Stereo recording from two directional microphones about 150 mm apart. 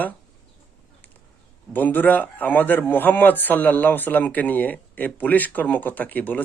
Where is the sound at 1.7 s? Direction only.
10° left (ahead or behind).